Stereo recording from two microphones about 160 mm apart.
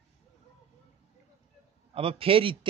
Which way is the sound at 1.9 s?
35° right (ahead or behind).